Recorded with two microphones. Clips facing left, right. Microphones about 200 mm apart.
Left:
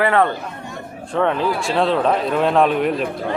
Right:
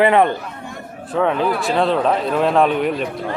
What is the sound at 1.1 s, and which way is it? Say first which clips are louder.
A man's voice: right 1 dB; centre (ahead or behind).